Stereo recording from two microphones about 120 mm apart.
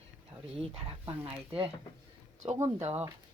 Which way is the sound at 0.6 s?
55° right (ahead or behind).